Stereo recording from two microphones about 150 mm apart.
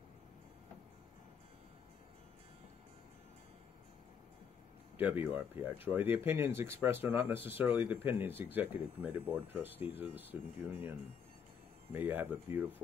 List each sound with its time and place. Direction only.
4.9 s speech: 15° right (ahead or behind)
11.9 s speech: 15° right (ahead or behind)